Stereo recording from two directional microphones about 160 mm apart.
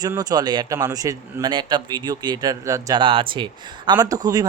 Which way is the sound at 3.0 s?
30° right (ahead or behind).